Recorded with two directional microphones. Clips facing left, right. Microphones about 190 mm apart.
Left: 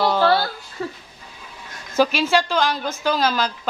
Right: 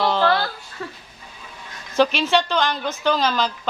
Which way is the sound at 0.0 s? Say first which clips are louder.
Left 1 dB; 10° left (ahead or behind).